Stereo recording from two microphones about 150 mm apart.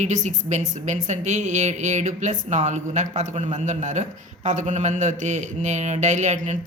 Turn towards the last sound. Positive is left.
turn(degrees=-55)  # may be behind; listen again after turning